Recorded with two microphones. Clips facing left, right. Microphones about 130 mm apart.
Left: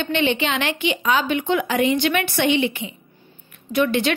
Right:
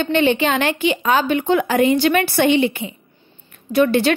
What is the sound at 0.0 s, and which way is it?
A woman's voice, 45° right (ahead or behind).